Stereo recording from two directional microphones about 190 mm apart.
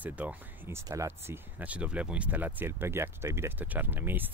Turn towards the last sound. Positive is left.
turn(degrees=-10)  # may be behind; listen again after turning